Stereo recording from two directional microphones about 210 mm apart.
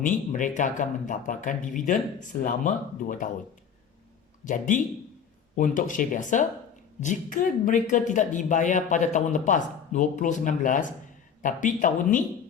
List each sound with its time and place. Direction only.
0.0 s speech: 40° left (ahead or behind)
4.4 s speech: 40° left (ahead or behind)